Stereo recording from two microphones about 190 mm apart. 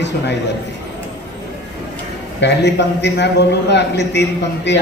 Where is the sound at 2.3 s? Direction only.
65° left (ahead or behind).